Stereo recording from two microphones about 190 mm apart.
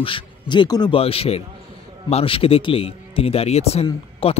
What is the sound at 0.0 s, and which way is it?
A man's voice, 25° left (ahead or behind).